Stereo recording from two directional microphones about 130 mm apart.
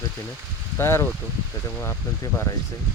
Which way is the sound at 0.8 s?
20° left (ahead or behind).